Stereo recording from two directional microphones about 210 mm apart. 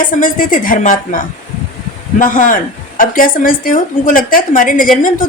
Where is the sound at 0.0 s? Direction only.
40° left (ahead or behind).